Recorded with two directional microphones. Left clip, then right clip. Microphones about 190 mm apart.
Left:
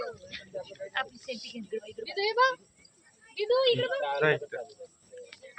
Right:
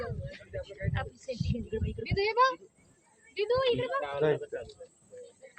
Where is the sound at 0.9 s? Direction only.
Centre (ahead or behind).